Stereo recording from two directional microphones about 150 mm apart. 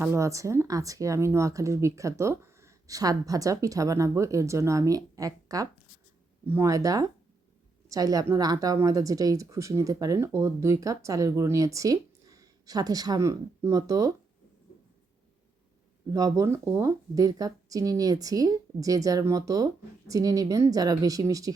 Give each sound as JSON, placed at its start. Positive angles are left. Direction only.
{"t": 0.0, "sound": "speech", "side_deg": -20}
{"t": 16.0, "sound": "speech", "side_deg": -25}